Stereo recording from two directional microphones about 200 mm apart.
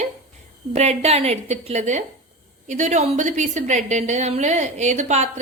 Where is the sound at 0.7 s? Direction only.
35° right (ahead or behind).